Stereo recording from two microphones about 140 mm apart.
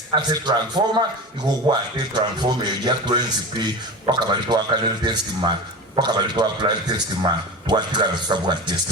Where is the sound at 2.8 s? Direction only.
30° right (ahead or behind).